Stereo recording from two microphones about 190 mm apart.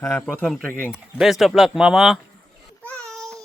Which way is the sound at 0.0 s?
10° left (ahead or behind).